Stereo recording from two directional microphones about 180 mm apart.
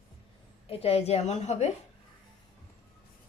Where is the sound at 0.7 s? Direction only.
35° left (ahead or behind).